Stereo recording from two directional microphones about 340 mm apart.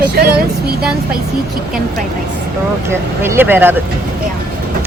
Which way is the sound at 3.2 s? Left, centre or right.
Centre.